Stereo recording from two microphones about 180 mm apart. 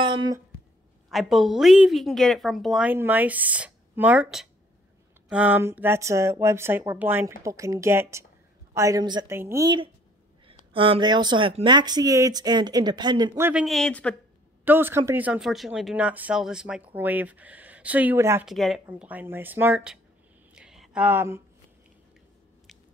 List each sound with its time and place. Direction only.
0.0 s a sound: 25° right (ahead or behind)
1.1 s a woman's voice: centre (ahead or behind); by 13.5 s 20° right (ahead or behind)
13.5 s a woman's voice: centre (ahead or behind)
14.6 s speech: 10° right (ahead or behind)
18.4 s a woman's voice: centre (ahead or behind)
20.5 s a sound: 5° right (ahead or behind)